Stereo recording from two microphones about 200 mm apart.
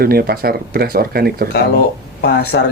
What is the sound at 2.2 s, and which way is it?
Speech, 55° left (ahead or behind).